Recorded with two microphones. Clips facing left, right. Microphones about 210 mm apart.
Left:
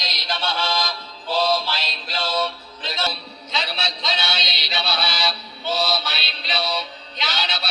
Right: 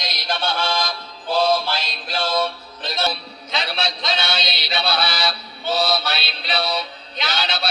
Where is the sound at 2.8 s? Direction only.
55° right (ahead or behind).